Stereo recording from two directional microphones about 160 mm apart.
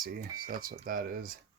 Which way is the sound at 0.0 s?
65° right (ahead or behind).